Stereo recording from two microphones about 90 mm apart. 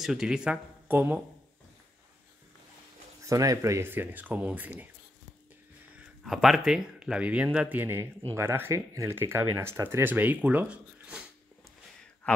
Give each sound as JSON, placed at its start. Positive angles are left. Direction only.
{"t": 0.0, "sound": "speech", "side_deg": -5}
{"t": 0.8, "sound": "speech", "side_deg": -20}
{"t": 3.2, "sound": "speech", "side_deg": -40}
{"t": 6.2, "sound": "speech", "side_deg": 0}